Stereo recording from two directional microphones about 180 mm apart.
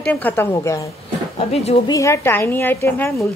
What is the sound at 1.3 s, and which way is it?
Speech, 35° left (ahead or behind).